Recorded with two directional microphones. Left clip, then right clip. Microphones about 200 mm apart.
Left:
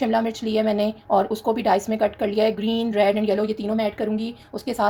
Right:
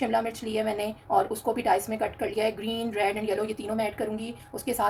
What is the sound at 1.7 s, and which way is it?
Speech, 30° left (ahead or behind).